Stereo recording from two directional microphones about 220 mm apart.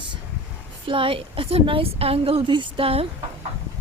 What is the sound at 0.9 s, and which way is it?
A woman's voice, 25° right (ahead or behind).